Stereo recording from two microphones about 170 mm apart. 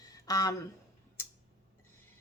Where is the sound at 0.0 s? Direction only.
20° left (ahead or behind).